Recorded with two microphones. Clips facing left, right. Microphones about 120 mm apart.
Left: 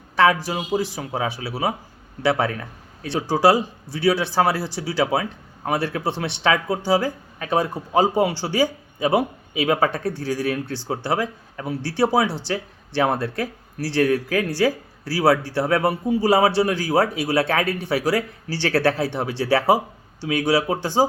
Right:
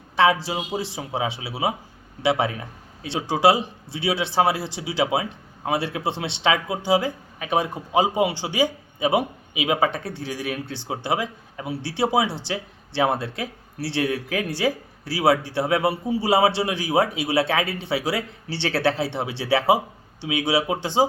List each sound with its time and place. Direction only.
0.8 s a man's voice: 25° right (ahead or behind)